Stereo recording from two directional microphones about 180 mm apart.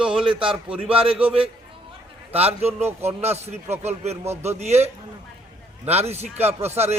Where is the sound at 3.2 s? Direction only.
35° right (ahead or behind).